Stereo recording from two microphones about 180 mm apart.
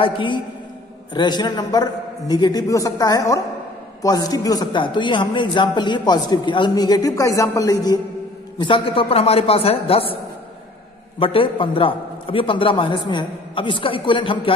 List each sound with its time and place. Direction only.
0.0 s a man's voice: 25° left (ahead or behind)
11.1 s a man's voice: 30° left (ahead or behind)